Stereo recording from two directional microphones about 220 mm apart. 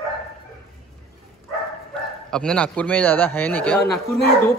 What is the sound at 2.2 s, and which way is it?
Speech, 5° left (ahead or behind).